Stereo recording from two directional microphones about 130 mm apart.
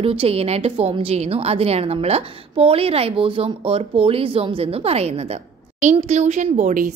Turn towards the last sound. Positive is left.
turn(degrees=-75)  # may be behind; listen again after turning